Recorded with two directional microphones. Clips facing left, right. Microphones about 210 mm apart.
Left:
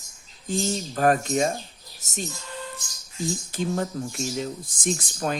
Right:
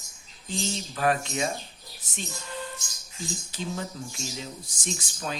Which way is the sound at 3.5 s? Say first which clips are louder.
Left 6 dB; 50° left (ahead or behind).